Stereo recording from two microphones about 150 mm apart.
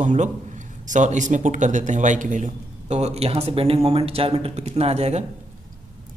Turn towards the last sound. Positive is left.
turn(degrees=-45)  # may be behind; listen again after turning